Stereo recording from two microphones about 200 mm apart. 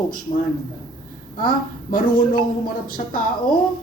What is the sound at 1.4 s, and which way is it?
A woman's voice, 45° left (ahead or behind).